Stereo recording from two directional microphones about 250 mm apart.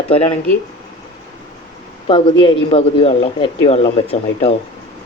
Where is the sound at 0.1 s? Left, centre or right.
Left.